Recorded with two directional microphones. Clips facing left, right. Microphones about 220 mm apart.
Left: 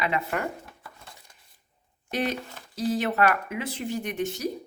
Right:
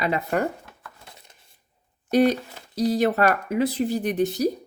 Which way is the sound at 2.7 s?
40° right (ahead or behind).